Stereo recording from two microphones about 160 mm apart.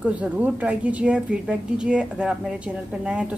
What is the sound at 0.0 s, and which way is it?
A woman's voice, 10° right (ahead or behind).